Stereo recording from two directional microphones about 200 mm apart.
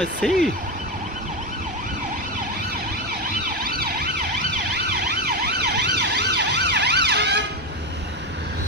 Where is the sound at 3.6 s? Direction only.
50° right (ahead or behind).